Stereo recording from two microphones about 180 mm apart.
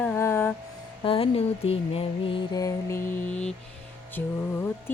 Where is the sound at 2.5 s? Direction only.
15° left (ahead or behind).